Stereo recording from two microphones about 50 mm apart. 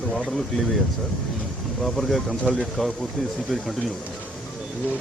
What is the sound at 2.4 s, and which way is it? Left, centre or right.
Speech, centre.